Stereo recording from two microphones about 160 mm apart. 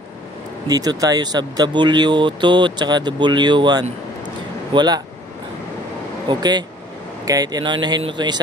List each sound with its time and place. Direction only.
0.7 s speech: 25° right (ahead or behind)
6.2 s speech: 25° right (ahead or behind)